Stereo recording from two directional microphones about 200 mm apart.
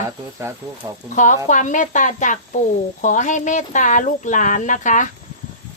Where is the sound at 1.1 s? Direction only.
40° left (ahead or behind).